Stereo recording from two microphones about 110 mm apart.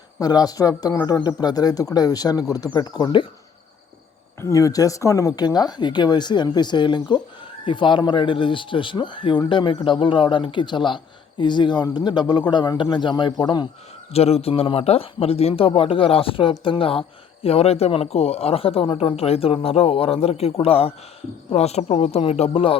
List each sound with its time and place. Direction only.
0.2 s speech: 35° left (ahead or behind)
4.4 s speech: 30° left (ahead or behind)
14.1 s speech: 65° left (ahead or behind)
21.5 s speech: 75° left (ahead or behind); by 22.8 s 55° left (ahead or behind)